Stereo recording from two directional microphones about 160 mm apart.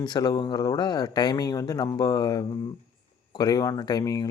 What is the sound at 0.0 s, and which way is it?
Speech, 25° left (ahead or behind).